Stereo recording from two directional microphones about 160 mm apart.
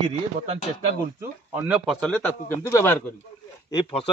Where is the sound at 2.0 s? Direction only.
5° left (ahead or behind).